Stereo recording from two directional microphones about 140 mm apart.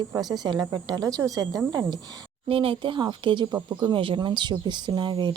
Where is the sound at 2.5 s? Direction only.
40° right (ahead or behind).